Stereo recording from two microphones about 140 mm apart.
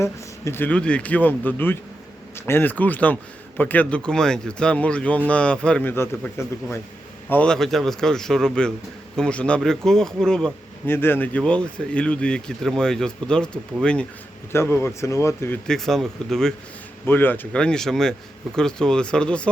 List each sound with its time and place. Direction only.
0.0 s a man's voice: 20° left (ahead or behind)
10.8 s speech: 15° left (ahead or behind)
14.5 s speech: 20° left (ahead or behind)
15.6 s a man's voice: 5° left (ahead or behind)
17.1 s a man's voice: 15° left (ahead or behind)